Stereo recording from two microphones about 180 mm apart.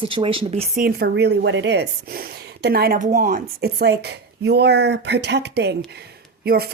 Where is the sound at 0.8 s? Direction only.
65° right (ahead or behind).